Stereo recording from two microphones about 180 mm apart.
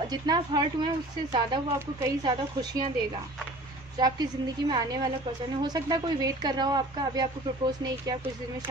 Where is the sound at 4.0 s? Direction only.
20° right (ahead or behind).